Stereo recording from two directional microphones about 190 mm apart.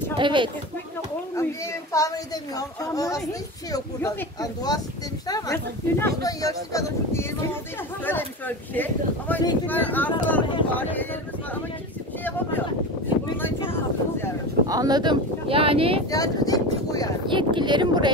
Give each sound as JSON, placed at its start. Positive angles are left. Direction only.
{"t": 0.2, "sound": "speech", "side_deg": -25}
{"t": 1.3, "sound": "speech", "side_deg": 15}
{"t": 13.7, "sound": "speech", "side_deg": 10}
{"t": 14.7, "sound": "speech", "side_deg": -20}
{"t": 16.1, "sound": "speech", "side_deg": 20}
{"t": 17.3, "sound": "speech", "side_deg": -25}